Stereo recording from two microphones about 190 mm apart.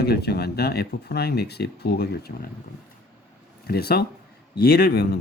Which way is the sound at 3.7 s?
55° left (ahead or behind).